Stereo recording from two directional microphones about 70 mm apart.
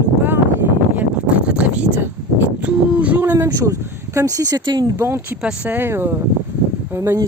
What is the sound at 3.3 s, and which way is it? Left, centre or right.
Speech, right.